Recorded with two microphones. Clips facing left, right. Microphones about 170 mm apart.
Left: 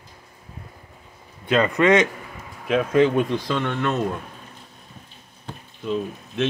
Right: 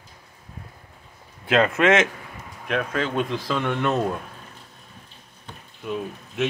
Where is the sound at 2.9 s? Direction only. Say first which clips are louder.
Left 10 dB; 15° left (ahead or behind).